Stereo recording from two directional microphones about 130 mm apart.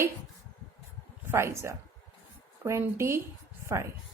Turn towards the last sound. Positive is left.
turn(degrees=-20)  # may be behind; listen again after turning